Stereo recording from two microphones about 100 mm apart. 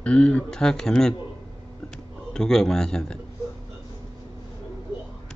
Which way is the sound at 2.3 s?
5° left (ahead or behind).